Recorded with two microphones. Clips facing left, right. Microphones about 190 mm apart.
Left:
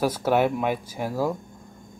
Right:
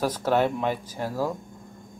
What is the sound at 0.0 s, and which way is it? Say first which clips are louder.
Speech: left 2 dB; 10° left (ahead or behind).